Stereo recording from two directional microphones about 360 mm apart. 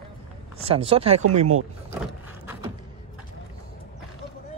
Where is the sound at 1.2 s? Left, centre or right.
Right.